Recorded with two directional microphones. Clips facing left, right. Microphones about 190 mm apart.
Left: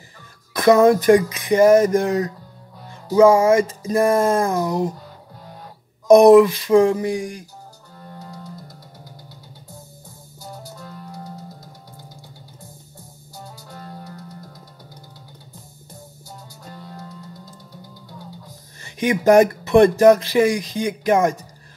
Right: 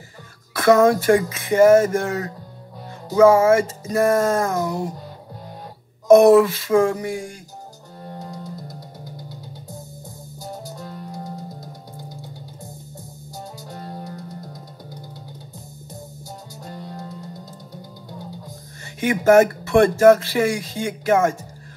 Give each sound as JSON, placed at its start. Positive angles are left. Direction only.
{"t": 0.5, "sound": "speech", "side_deg": 15}
{"t": 3.3, "sound": "speech", "side_deg": 15}
{"t": 6.0, "sound": "speech", "side_deg": 15}
{"t": 8.0, "sound": "music", "side_deg": -25}
{"t": 13.7, "sound": "music", "side_deg": -25}
{"t": 19.0, "sound": "speech", "side_deg": 15}